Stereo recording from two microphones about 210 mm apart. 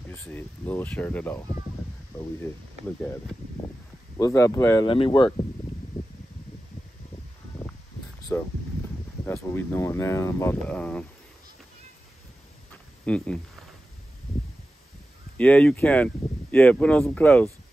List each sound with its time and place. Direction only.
0.1 s speech: 10° left (ahead or behind)
2.1 s speech: 15° left (ahead or behind)
4.2 s speech: 15° left (ahead or behind)
8.3 s speech: 10° left (ahead or behind)
13.0 s speech: 5° left (ahead or behind)
15.3 s speech: 5° left (ahead or behind)